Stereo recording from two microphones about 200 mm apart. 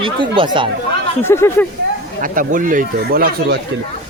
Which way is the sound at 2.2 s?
45° right (ahead or behind).